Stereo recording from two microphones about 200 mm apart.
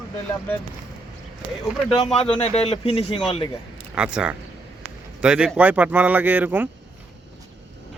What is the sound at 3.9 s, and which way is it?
Speech, 5° right (ahead or behind).